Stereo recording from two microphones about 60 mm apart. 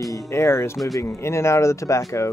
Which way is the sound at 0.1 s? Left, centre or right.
Left.